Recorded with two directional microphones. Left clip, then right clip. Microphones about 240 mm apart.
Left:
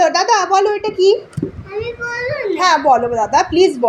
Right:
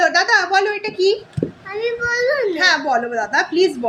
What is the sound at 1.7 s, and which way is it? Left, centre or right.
Child singing, right.